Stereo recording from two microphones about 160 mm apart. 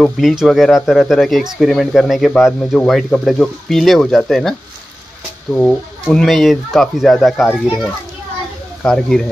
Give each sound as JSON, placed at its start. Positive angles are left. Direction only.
{"t": 0.0, "sound": "speech", "side_deg": 0}